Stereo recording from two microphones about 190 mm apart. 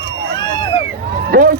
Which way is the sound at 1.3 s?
50° right (ahead or behind).